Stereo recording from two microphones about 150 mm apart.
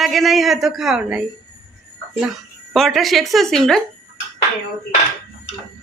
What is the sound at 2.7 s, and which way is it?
A woman's voice, centre (ahead or behind).